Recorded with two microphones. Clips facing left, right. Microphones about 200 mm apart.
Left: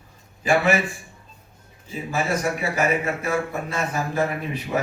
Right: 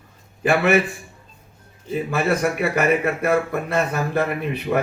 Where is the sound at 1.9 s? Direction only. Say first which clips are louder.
Right 4 dB; 60° right (ahead or behind).